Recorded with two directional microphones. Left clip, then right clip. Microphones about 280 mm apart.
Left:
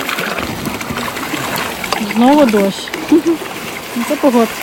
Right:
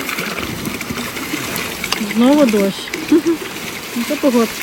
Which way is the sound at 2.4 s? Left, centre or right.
Centre.